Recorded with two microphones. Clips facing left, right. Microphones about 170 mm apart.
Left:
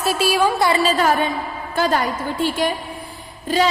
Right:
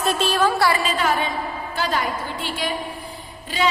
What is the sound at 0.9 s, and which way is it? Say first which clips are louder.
A woman's voice: left 4 dB; 40° left (ahead or behind).